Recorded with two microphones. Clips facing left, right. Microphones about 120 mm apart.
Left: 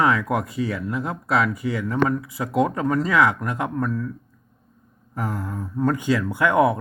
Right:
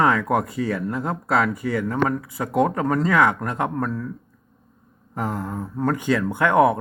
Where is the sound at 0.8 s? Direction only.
40° right (ahead or behind).